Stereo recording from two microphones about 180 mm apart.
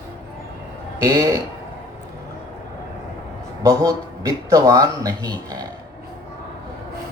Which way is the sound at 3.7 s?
20° right (ahead or behind).